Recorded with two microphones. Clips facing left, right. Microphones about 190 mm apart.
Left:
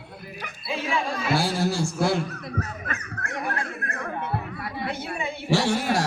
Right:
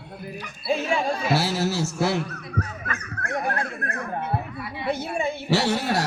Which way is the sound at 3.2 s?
45° right (ahead or behind).